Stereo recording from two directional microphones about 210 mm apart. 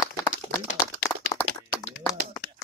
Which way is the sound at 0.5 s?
45° left (ahead or behind).